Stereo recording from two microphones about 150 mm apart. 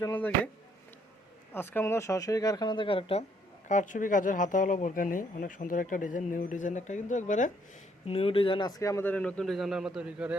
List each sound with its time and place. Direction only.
0.0 s speech: 15° left (ahead or behind)
1.5 s speech: 15° left (ahead or behind); by 3.2 s 40° left (ahead or behind)
3.7 s speech: 55° left (ahead or behind)
8.0 s speech: 40° left (ahead or behind); by 10.3 s 10° right (ahead or behind)